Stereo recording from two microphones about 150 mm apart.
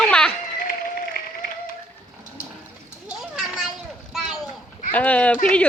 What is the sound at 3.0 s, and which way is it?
Children playing, 5° right (ahead or behind).